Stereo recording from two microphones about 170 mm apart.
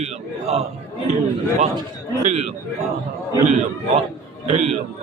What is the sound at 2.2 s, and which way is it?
Speech, 40° right (ahead or behind).